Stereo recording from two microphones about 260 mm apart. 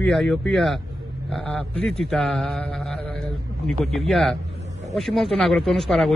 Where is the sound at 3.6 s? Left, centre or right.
Centre.